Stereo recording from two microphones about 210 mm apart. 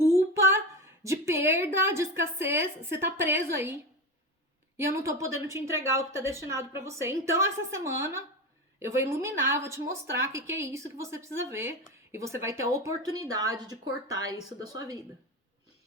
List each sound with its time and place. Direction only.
0.3 s a woman's voice: 15° right (ahead or behind)
4.8 s a woman's voice: 15° right (ahead or behind)